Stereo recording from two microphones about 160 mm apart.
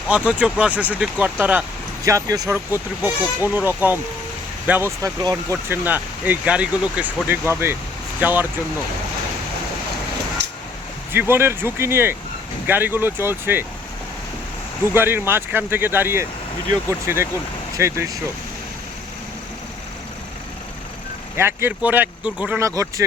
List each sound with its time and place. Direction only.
0.1 s speech: 5° right (ahead or behind)
2.0 s speech: 20° right (ahead or behind)
11.1 s speech: 15° right (ahead or behind)
14.9 s speech: 15° right (ahead or behind)
21.3 s speech: 15° right (ahead or behind)
22.6 s speech: 20° right (ahead or behind)